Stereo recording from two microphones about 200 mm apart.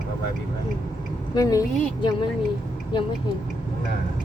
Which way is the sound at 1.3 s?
15° left (ahead or behind).